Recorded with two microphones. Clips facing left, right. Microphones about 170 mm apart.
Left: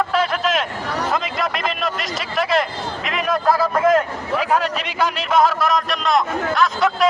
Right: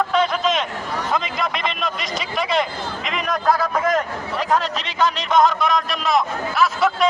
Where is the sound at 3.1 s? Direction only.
Centre (ahead or behind).